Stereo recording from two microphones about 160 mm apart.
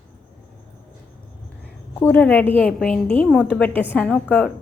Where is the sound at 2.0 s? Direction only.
10° left (ahead or behind).